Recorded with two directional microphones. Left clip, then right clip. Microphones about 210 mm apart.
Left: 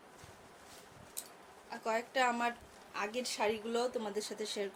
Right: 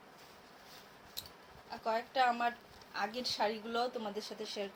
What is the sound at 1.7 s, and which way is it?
A woman's voice, 25° left (ahead or behind).